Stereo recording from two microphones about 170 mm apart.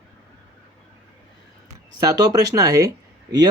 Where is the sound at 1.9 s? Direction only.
20° right (ahead or behind).